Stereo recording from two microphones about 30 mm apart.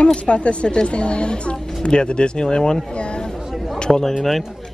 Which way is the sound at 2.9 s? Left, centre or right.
Left.